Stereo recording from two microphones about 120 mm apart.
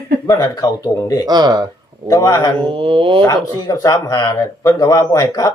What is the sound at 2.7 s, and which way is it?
Speech, 45° right (ahead or behind).